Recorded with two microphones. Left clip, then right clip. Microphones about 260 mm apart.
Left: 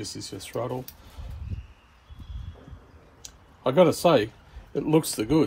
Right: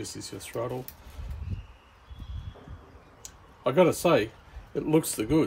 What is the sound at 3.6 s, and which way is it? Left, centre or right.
Speech, centre.